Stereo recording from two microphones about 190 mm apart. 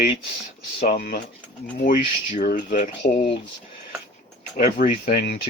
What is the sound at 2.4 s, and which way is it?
Speech, 50° left (ahead or behind).